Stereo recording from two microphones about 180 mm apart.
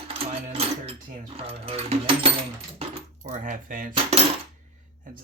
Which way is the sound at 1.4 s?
35° right (ahead or behind).